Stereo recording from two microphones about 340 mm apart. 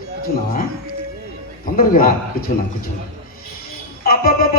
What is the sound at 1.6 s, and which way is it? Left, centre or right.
Speech, left.